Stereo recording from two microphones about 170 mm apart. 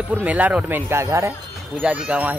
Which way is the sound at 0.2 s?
10° right (ahead or behind).